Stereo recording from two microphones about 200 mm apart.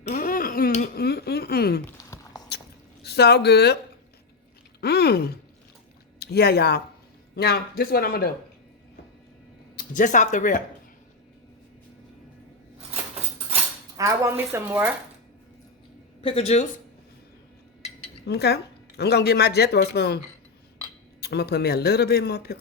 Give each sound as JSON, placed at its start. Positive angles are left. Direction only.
{"t": 0.0, "sound": "a sound", "side_deg": 40}
{"t": 2.0, "sound": "a sound", "side_deg": 15}
{"t": 3.0, "sound": "speech", "side_deg": 55}
{"t": 4.8, "sound": "a sound", "side_deg": 50}
{"t": 6.1, "sound": "speech", "side_deg": 50}
{"t": 9.7, "sound": "speech", "side_deg": 40}
{"t": 13.9, "sound": "speech", "side_deg": -15}
{"t": 16.2, "sound": "speech", "side_deg": 30}
{"t": 18.3, "sound": "speech", "side_deg": 55}
{"t": 21.2, "sound": "speech", "side_deg": 55}